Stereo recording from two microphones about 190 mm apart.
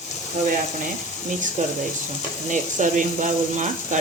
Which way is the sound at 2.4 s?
40° right (ahead or behind).